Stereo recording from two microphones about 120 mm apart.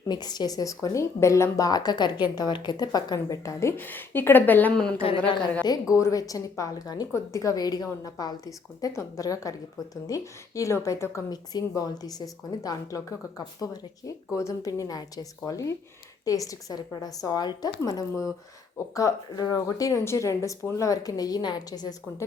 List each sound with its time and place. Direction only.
0.1 s a woman's voice: 35° left (ahead or behind); by 4.9 s 10° left (ahead or behind)
5.0 s a woman's voice: 45° left (ahead or behind)
5.9 s a woman's voice: 30° left (ahead or behind)